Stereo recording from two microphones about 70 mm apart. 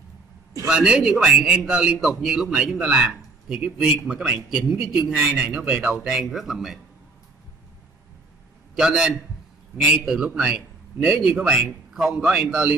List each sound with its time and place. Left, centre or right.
0.7 s a man's voice: centre
8.7 s a man's voice: centre